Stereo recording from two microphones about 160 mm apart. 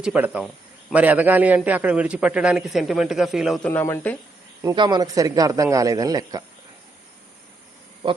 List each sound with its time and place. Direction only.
0.0 s a man's voice: 10° right (ahead or behind)
3.7 s speech: 15° left (ahead or behind)
4.6 s speech: 25° right (ahead or behind)